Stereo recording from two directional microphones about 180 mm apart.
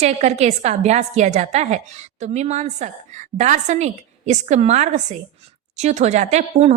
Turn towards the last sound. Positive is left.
turn(degrees=-35)  # may be behind; listen again after turning